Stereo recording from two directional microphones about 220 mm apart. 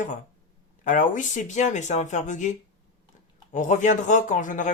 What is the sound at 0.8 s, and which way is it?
Speech, 35° left (ahead or behind).